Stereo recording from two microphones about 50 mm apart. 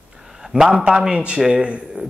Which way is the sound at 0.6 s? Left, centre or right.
Centre.